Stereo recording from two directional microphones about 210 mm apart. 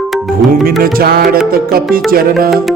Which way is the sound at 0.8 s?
45° right (ahead or behind).